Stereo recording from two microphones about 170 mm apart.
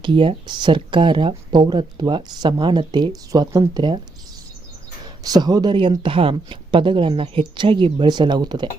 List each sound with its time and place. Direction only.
0.0 s speech: 30° right (ahead or behind)
5.2 s speech: 20° right (ahead or behind)